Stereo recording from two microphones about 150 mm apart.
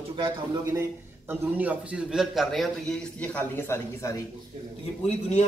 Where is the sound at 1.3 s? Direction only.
10° right (ahead or behind); by 4.1 s 15° left (ahead or behind).